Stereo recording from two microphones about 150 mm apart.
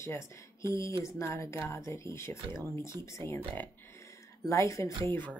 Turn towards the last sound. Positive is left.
turn(degrees=10)  # may be behind; listen again after turning